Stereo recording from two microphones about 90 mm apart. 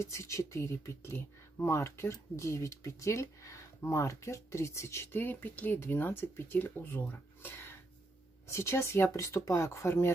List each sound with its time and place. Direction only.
0.0 s speech: 35° left (ahead or behind)